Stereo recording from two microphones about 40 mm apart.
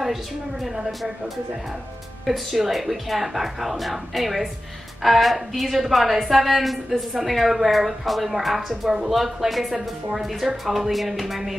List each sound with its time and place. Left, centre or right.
0.0 s a woman's voice: centre